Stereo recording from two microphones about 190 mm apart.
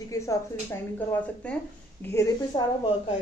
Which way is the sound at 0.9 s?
5° left (ahead or behind).